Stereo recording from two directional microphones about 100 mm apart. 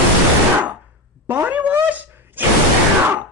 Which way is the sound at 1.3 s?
15° right (ahead or behind).